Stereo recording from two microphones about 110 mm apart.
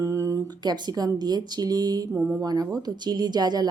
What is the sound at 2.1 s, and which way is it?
Mantra, 20° right (ahead or behind).